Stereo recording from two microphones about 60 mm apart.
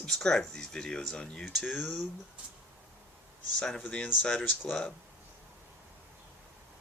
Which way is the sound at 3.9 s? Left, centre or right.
Centre.